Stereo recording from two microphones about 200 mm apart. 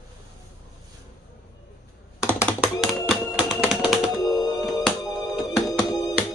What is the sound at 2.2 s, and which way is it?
Computer keyboard, 15° left (ahead or behind).